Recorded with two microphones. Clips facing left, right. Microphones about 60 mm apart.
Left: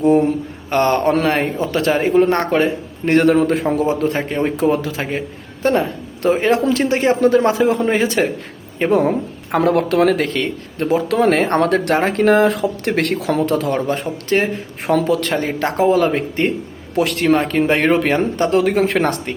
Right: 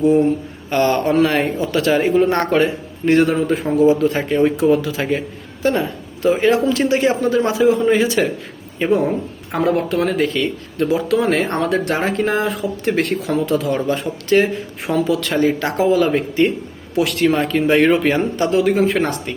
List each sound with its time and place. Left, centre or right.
0.7 s a man's voice: left
3.1 s a man's voice: left
8.8 s a woman's voice: left
10.8 s speech: left
11.1 s speech: left
13.4 s speech: left
13.7 s a man's voice: left
14.8 s a man's voice: left